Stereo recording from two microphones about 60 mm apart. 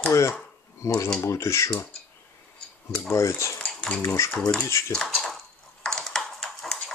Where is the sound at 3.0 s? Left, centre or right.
Left.